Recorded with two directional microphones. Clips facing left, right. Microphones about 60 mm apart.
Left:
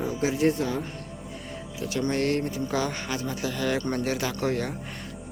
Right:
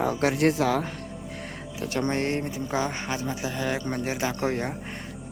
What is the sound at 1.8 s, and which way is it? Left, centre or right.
Speech, right.